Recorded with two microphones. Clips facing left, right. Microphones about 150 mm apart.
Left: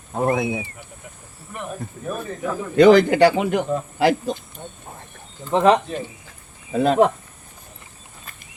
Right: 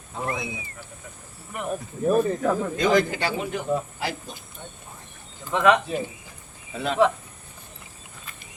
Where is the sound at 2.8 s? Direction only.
70° left (ahead or behind).